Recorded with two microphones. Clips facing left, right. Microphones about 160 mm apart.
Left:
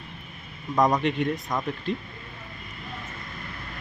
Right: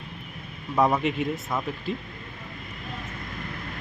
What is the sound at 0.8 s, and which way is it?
Speech, 5° right (ahead or behind).